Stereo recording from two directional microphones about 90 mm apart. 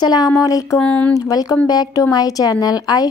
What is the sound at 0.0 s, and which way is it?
Speech, 50° left (ahead or behind).